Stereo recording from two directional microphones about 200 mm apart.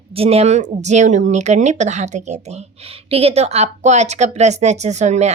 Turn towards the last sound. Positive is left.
turn(degrees=-35)  # may be behind; listen again after turning